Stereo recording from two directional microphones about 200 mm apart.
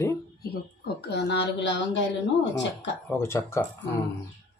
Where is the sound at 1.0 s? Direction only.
55° left (ahead or behind).